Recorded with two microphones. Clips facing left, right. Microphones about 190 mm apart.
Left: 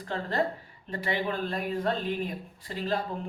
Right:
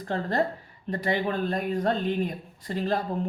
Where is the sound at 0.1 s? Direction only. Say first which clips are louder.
Right 3 dB; 40° right (ahead or behind).